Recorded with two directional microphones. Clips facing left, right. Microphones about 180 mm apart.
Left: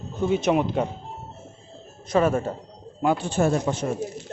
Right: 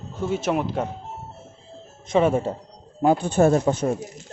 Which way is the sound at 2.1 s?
25° right (ahead or behind).